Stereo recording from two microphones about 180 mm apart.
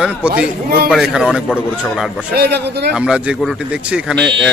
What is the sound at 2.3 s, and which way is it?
Speech, 65° right (ahead or behind).